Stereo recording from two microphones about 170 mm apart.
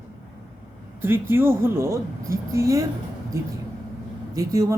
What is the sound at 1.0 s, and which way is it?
Speech, 15° right (ahead or behind).